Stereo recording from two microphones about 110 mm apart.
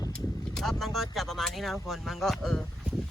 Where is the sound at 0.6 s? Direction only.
Centre (ahead or behind).